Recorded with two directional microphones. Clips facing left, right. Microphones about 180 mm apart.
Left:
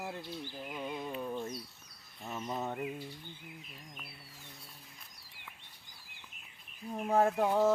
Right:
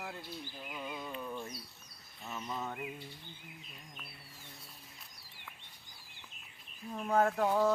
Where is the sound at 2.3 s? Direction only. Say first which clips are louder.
Left 3 dB; 35° left (ahead or behind).